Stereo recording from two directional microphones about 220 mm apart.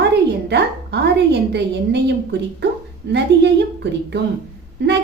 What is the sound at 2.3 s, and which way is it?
A woman's voice, 50° right (ahead or behind).